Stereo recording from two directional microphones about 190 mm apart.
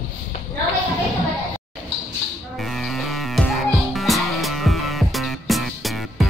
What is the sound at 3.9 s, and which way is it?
Music, centre (ahead or behind).